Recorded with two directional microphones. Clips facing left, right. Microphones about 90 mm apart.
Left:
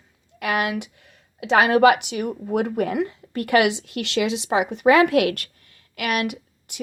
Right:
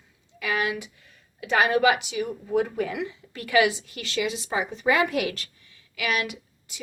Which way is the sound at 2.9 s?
50° left (ahead or behind).